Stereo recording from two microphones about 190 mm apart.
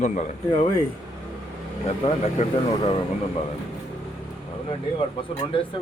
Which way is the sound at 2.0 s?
30° left (ahead or behind).